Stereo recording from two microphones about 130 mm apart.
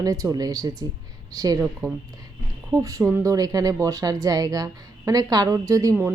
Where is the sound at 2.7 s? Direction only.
25° right (ahead or behind).